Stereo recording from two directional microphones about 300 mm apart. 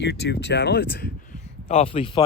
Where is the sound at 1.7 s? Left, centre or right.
Centre.